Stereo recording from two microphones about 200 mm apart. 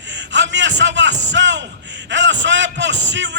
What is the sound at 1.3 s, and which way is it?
A man's voice, 65° right (ahead or behind).